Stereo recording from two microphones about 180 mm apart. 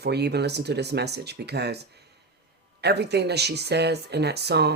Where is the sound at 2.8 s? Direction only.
65° right (ahead or behind).